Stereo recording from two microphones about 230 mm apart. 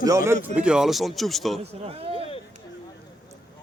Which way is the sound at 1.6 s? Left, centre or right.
Right.